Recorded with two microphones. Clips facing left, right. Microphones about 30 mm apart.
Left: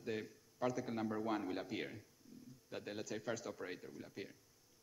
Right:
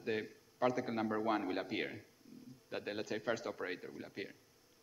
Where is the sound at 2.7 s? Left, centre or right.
Right.